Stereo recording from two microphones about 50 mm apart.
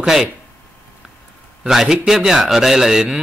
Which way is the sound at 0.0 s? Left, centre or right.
Centre.